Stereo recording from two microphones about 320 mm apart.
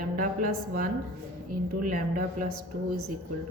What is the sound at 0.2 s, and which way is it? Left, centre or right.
Speech, right.